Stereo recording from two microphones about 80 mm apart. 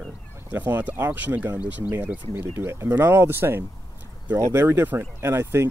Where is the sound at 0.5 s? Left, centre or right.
Right.